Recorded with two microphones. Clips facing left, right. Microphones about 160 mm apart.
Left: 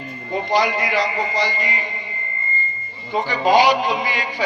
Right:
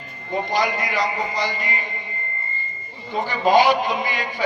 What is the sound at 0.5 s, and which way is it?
Speech, 45° right (ahead or behind).